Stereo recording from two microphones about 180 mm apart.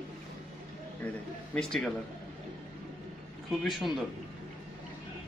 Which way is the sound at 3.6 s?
Centre (ahead or behind).